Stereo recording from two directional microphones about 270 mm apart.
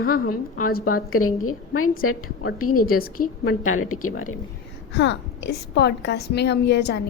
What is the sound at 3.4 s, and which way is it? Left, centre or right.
Speech, left.